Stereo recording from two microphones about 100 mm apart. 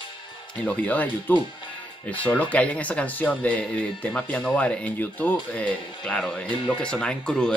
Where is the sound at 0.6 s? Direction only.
15° left (ahead or behind).